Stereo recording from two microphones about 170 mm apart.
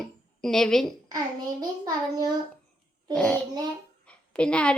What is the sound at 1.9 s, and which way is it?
Child singing, 20° right (ahead or behind).